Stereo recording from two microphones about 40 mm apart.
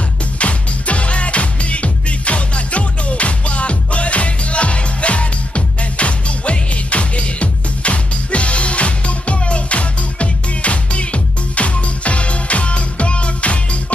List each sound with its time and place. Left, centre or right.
0.4 s music: left